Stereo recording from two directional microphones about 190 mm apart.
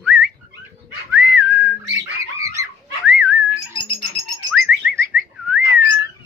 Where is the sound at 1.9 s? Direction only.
15° right (ahead or behind).